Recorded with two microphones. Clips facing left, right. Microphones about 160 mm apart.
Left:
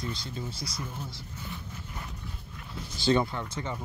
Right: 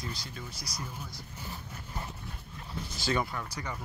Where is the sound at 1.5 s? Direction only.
30° right (ahead or behind).